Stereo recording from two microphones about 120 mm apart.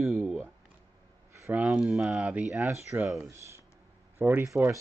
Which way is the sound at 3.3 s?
20° right (ahead or behind).